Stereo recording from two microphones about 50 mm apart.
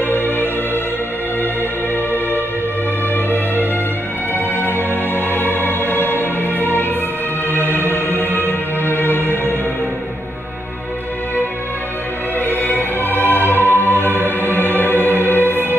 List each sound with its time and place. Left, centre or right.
0.0 s music: left
4.7 s music: left
7.8 s music: left
12.4 s music: left